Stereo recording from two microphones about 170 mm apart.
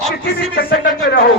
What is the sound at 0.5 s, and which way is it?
Speech, 65° left (ahead or behind).